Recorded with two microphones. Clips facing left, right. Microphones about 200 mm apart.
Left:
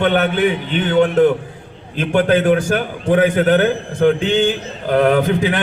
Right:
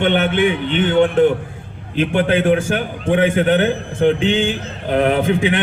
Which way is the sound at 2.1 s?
40° left (ahead or behind).